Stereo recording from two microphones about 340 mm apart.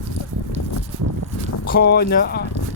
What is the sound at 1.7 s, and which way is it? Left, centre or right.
Speech, left.